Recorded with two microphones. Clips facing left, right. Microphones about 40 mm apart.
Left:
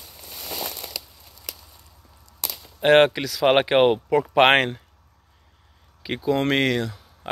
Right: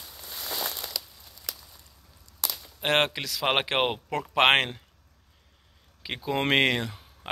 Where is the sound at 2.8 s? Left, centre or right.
Centre.